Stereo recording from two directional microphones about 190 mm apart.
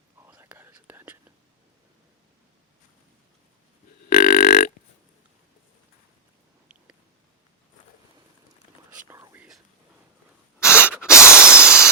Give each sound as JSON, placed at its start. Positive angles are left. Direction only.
{"t": 0.3, "sound": "whispering", "side_deg": -10}
{"t": 4.1, "sound": "grunt", "side_deg": 45}
{"t": 9.0, "sound": "whispering", "side_deg": -10}
{"t": 10.6, "sound": "spray", "side_deg": 15}
{"t": 10.8, "sound": "spray", "side_deg": -5}
{"t": 11.1, "sound": "a sound", "side_deg": 15}
{"t": 11.6, "sound": "a sound", "side_deg": -5}